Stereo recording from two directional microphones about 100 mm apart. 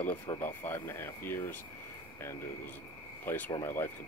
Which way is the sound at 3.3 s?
20° left (ahead or behind).